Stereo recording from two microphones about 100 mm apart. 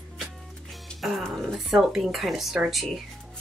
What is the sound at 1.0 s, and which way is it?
Speech, centre (ahead or behind).